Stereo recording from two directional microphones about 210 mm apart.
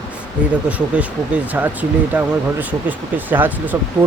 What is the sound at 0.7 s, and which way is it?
Speech, 5° right (ahead or behind).